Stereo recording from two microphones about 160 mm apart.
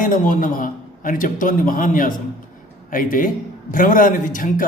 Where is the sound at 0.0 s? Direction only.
55° left (ahead or behind).